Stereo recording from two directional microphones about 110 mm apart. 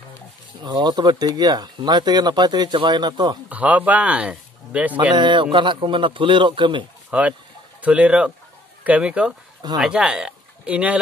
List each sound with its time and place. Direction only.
0.7 s speech: 40° right (ahead or behind)
3.4 s speech: 15° right (ahead or behind)
5.1 s a man's voice: 45° right (ahead or behind)
7.1 s speech: 10° right (ahead or behind)